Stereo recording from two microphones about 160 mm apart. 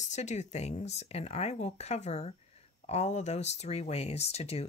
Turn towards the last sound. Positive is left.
turn(degrees=40)  # may be behind; listen again after turning